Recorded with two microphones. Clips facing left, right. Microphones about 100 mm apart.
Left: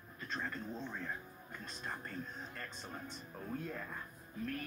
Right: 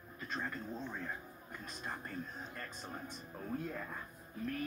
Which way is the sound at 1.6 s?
5° right (ahead or behind).